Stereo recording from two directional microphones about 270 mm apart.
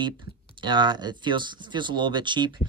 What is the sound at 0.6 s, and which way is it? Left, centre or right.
Speech, centre.